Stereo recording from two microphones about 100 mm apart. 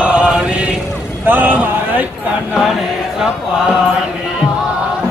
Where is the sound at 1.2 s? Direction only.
20° right (ahead or behind).